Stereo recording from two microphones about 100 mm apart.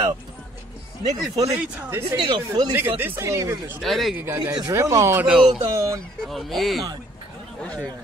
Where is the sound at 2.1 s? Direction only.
40° right (ahead or behind).